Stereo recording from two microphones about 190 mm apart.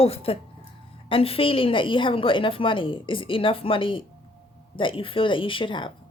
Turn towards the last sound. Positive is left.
turn(degrees=25)  # may be behind; listen again after turning